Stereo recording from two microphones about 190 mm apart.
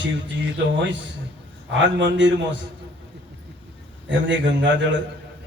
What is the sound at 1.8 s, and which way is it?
Speech, 70° right (ahead or behind).